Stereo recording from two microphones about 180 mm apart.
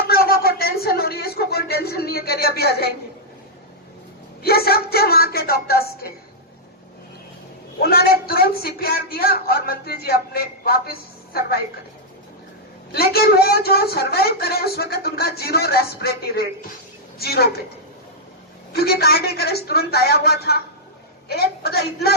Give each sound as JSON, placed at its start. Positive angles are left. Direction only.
{"t": 0.1, "sound": "a sound", "side_deg": 60}
{"t": 4.4, "sound": "a woman's voice", "side_deg": 60}
{"t": 7.8, "sound": "a woman's voice", "side_deg": 60}
{"t": 12.9, "sound": "a woman's voice", "side_deg": 60}
{"t": 18.7, "sound": "a woman's voice", "side_deg": 60}